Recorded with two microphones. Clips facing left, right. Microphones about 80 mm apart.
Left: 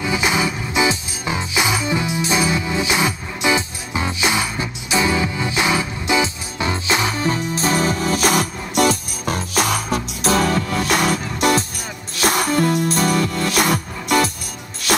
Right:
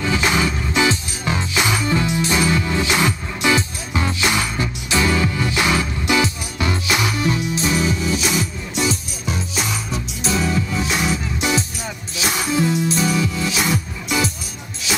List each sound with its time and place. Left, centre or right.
0.0 s music: centre; by 15.0 s left